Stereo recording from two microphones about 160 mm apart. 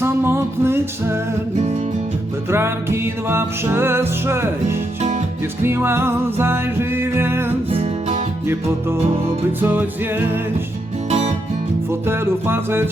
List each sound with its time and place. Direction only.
0.0 s music: 15° right (ahead or behind)
2.5 s music: 15° right (ahead or behind)
7.7 s music: 35° right (ahead or behind)
9.6 s music: 10° right (ahead or behind)
11.9 s music: 15° right (ahead or behind)